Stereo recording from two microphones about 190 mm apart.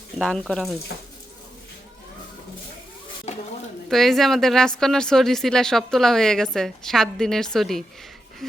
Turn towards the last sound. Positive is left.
turn(degrees=0)  # may be behind; listen again after turning